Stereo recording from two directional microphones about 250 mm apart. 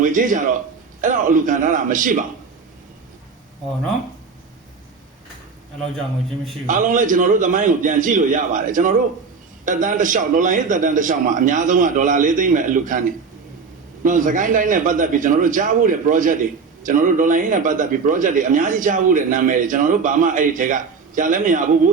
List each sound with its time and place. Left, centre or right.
0.0 s a man's voice: right
6.7 s a man's voice: right